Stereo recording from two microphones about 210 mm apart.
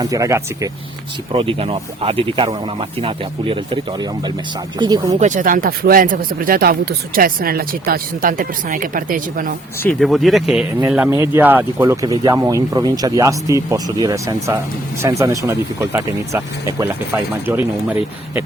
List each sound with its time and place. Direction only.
0.0 s speech: 15° right (ahead or behind)
1.3 s speech: 25° right (ahead or behind)
4.8 s speech: 20° right (ahead or behind)
5.2 s speech: 40° right (ahead or behind)
10.0 s speech: centre (ahead or behind)
10.8 s speech: 10° right (ahead or behind)